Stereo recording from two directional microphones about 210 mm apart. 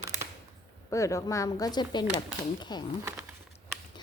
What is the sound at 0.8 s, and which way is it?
A woman's voice, 15° left (ahead or behind).